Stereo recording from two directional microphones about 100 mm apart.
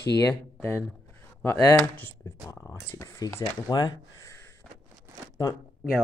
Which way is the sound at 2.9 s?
30° left (ahead or behind).